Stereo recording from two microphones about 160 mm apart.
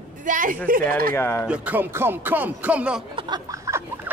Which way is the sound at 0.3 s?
60° right (ahead or behind).